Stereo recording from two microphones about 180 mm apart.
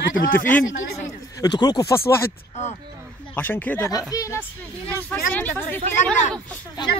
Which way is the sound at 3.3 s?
10° left (ahead or behind).